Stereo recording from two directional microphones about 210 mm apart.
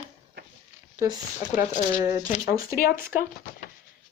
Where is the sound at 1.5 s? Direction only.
40° left (ahead or behind).